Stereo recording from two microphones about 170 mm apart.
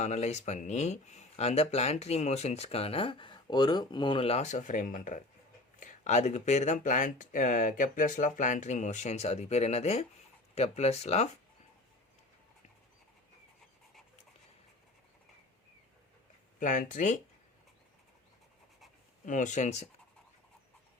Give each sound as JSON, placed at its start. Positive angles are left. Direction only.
{"t": 0.0, "sound": "speech", "side_deg": 40}
{"t": 16.6, "sound": "speech", "side_deg": 50}
{"t": 19.2, "sound": "speech", "side_deg": 45}